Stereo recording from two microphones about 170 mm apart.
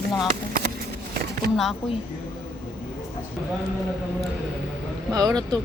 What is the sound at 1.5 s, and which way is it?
Speech, centre (ahead or behind).